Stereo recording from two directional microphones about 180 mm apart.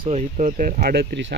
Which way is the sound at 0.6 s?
50° right (ahead or behind).